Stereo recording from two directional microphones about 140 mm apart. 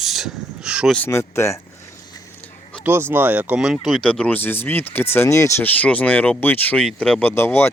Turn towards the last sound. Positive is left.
turn(degrees=15)  # may be behind; listen again after turning